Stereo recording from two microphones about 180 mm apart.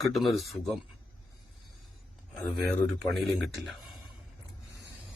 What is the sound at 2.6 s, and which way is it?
A man's voice, centre (ahead or behind).